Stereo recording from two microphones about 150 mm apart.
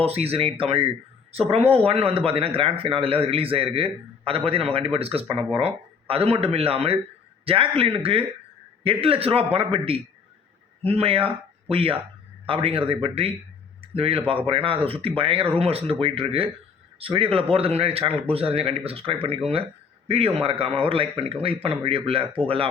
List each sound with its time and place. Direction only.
0.0 s a man's voice: 40° right (ahead or behind)